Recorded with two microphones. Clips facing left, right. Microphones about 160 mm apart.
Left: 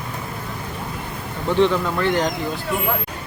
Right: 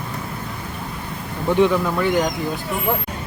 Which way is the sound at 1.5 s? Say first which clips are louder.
Right 1 dB; 10° right (ahead or behind).